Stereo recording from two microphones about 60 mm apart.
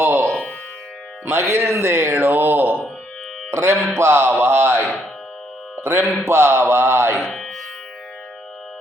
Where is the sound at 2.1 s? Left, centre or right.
Right.